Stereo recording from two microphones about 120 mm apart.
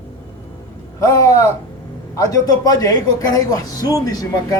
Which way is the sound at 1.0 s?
25° left (ahead or behind).